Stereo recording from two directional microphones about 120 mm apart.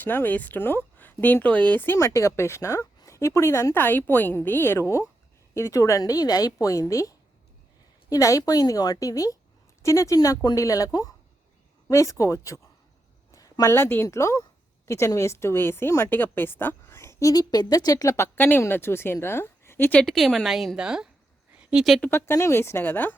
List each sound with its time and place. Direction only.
0.0 s a woman's voice: 15° left (ahead or behind); by 22.0 s 5° right (ahead or behind)
22.0 s speech: 20° left (ahead or behind)